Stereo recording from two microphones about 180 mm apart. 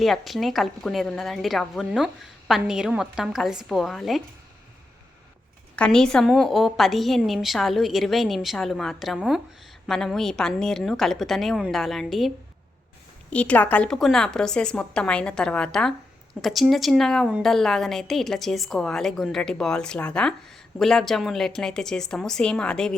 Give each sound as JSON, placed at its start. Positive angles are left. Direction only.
{"t": 0.0, "sound": "a woman's voice", "side_deg": 0}
{"t": 5.7, "sound": "a woman's voice", "side_deg": 5}
{"t": 13.3, "sound": "a woman's voice", "side_deg": 5}